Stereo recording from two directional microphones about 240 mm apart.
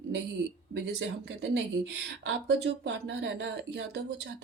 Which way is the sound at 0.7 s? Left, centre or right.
Right.